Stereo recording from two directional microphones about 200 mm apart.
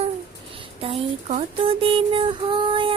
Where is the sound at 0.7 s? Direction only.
30° right (ahead or behind).